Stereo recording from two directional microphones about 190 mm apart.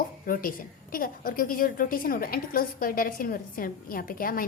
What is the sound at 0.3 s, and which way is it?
A woman's voice, 50° left (ahead or behind).